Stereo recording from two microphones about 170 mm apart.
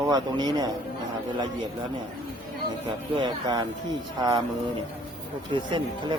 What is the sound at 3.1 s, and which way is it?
Speech, 30° right (ahead or behind).